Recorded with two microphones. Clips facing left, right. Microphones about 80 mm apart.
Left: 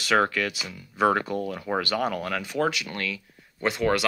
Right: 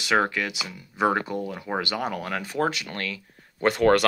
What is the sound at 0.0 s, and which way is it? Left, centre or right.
Speech, right.